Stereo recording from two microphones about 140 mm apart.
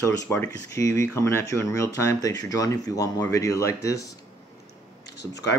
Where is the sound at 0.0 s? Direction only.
20° left (ahead or behind).